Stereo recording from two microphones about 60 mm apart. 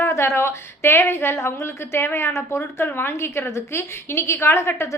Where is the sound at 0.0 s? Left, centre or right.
Left.